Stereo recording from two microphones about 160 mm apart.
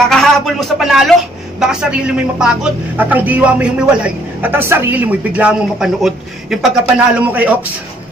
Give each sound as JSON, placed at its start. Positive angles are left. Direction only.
{"t": 0.1, "sound": "a man's voice", "side_deg": 0}